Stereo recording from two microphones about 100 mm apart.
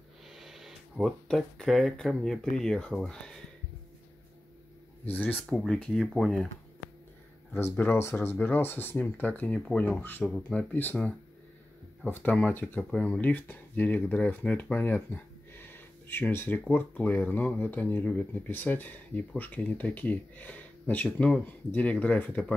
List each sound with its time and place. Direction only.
0.3 s speech: centre (ahead or behind)
5.0 s speech: 20° left (ahead or behind)
5.5 s speech: 5° left (ahead or behind)
7.5 s speech: 20° left (ahead or behind)
10.0 s speech: 20° left (ahead or behind)
10.3 s speech: 10° left (ahead or behind)
12.1 s speech: 20° left (ahead or behind)